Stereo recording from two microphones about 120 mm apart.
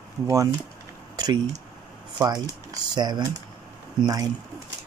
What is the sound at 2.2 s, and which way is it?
Speech, 30° right (ahead or behind).